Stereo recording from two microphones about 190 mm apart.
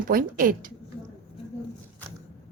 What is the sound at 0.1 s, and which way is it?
Speech, 45° right (ahead or behind).